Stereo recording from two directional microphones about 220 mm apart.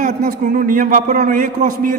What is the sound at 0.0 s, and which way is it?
A man's voice, 35° right (ahead or behind).